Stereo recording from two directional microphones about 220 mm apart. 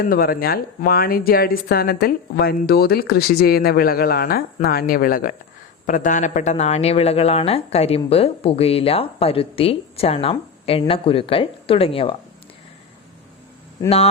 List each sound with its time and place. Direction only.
0.0 s speech: 40° left (ahead or behind); by 12.1 s 25° left (ahead or behind)